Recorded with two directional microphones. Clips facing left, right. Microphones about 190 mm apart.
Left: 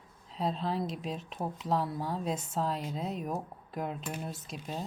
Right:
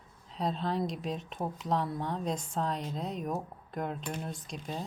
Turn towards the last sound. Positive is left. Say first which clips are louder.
# even
turn(degrees=5)  # may be behind; listen again after turning